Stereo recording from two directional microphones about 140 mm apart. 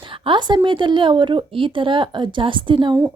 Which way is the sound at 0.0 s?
35° right (ahead or behind).